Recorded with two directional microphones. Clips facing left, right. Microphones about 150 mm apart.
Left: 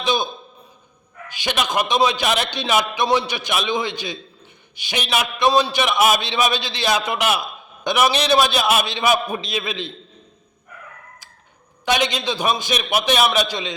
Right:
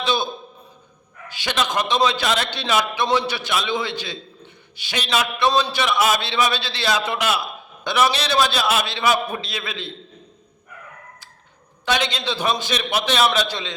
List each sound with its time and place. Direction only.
0.0 s a man's voice: 15° left (ahead or behind)
1.3 s a man's voice: 15° left (ahead or behind)
11.9 s a man's voice: 15° left (ahead or behind)